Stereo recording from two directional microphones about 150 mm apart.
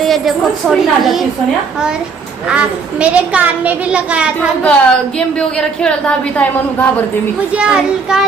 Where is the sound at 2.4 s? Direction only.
5° right (ahead or behind).